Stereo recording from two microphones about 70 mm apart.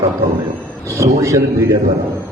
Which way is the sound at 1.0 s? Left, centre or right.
Right.